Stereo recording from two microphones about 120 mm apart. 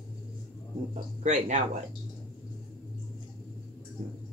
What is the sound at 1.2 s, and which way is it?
Speech, 85° right.